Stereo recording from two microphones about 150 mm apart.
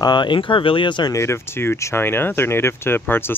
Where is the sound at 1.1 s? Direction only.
20° left (ahead or behind).